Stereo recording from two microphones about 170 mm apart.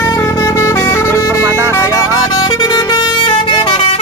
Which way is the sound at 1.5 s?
15° right (ahead or behind).